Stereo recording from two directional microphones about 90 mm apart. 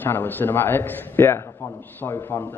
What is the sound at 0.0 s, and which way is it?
A man's voice, 20° left (ahead or behind).